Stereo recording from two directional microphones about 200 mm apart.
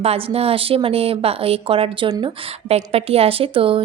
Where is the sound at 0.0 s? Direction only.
30° right (ahead or behind).